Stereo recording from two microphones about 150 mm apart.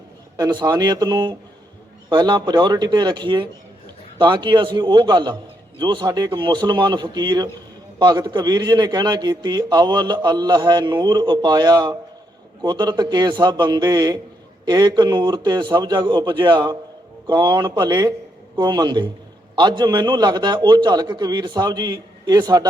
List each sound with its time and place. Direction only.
0.3 s a man's voice: 30° right (ahead or behind)